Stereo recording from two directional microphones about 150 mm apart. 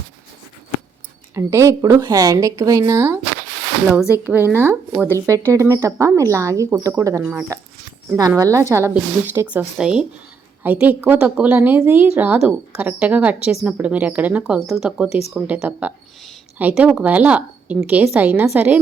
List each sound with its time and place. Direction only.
1.4 s a woman's voice: 20° right (ahead or behind)